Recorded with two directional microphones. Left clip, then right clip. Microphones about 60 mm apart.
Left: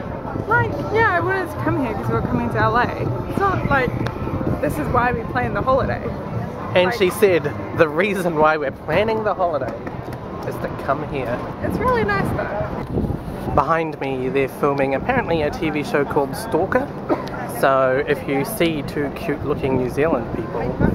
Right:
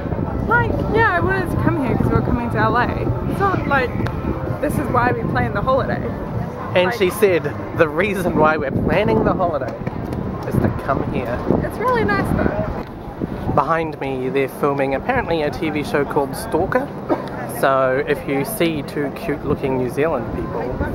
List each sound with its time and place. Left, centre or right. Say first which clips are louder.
0.5 s a sound: right 1 dB; centre
3.3 s speech: even; right
3.6 s speech: right 1 dB; centre
6.7 s speech: even; centre
11.6 s speech: left 3 dB; centre
13.6 s speech: even; centre